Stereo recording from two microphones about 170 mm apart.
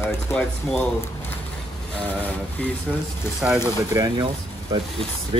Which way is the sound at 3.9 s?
20° right (ahead or behind).